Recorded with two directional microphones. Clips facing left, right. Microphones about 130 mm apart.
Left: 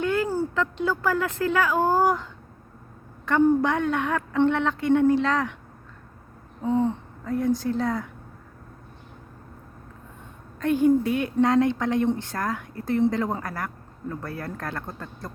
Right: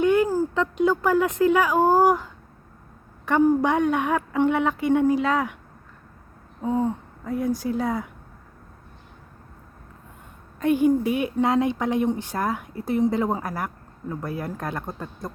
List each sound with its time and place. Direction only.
0.0 s a sound: 20° right (ahead or behind)
0.5 s a woman's voice: 20° right (ahead or behind)
6.6 s a woman's voice: 10° right (ahead or behind)
10.6 s a woman's voice: 15° right (ahead or behind)